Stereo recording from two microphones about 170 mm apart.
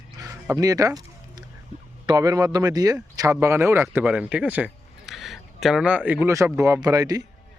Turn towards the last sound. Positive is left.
turn(degrees=-20)  # may be behind; listen again after turning